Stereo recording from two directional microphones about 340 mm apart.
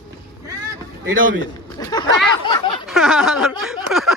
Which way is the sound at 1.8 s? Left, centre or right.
Centre.